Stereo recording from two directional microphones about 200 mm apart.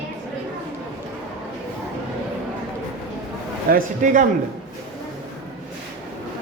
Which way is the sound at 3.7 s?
40° right (ahead or behind).